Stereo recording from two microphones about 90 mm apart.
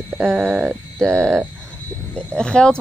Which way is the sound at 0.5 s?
15° right (ahead or behind).